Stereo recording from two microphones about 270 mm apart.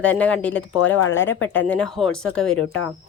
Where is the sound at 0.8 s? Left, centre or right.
Left.